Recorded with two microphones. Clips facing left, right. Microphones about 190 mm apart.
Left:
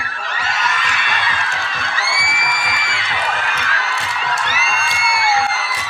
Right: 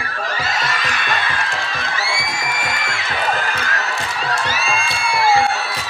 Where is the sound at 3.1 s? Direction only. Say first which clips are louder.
Right 2 dB; 35° right (ahead or behind).